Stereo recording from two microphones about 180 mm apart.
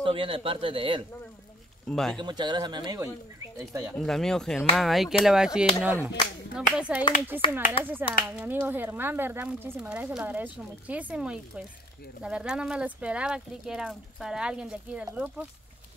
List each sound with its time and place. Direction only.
0.0 s speech: 30° right (ahead or behind)
1.9 s speech: centre (ahead or behind)
2.1 s speech: 25° right (ahead or behind)
3.9 s speech: centre (ahead or behind)
7.4 s speech: 30° left (ahead or behind)
7.8 s speech: 10° right (ahead or behind)